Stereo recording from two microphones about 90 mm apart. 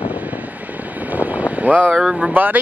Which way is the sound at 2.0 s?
5° right (ahead or behind).